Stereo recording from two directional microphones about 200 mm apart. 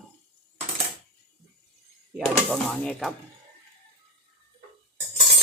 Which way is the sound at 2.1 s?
5° left (ahead or behind).